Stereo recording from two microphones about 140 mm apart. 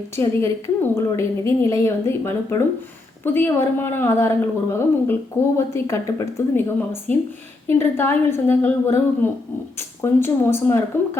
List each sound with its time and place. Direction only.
0.2 s a woman's voice: 20° left (ahead or behind)